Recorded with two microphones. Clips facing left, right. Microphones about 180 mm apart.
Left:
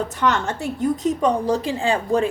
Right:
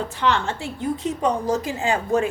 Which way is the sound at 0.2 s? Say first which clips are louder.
Even; 45° left (ahead or behind).